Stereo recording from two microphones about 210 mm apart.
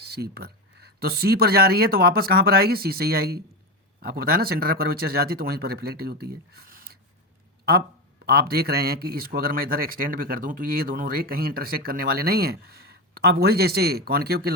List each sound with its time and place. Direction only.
0.0 s a man's voice: 50° right (ahead or behind)